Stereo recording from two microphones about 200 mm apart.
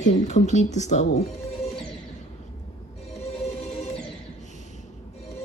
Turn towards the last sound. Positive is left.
turn(degrees=30)  # may be behind; listen again after turning